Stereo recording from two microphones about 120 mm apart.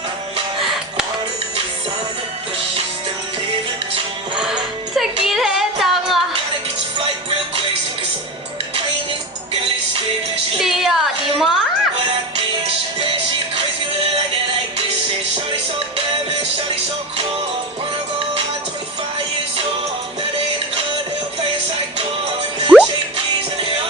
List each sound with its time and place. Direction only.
4.4 s music: 5° right (ahead or behind)
7.3 s music: 50° right (ahead or behind)
9.5 s music: 50° right (ahead or behind)
10.6 s a sound: centre (ahead or behind)
12.4 s music: 50° right (ahead or behind)
16.0 s music: 45° right (ahead or behind)
22.7 s music: centre (ahead or behind)
23.1 s music: 50° right (ahead or behind)